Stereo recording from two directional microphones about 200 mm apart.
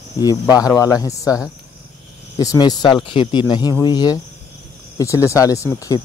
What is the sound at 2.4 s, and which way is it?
Speech, 20° left (ahead or behind).